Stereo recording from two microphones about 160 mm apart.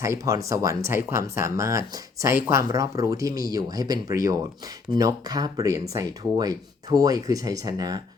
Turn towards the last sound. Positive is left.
turn(degrees=-25)  # may be behind; listen again after turning